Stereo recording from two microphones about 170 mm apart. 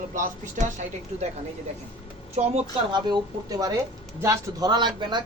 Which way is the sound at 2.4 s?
40° right (ahead or behind).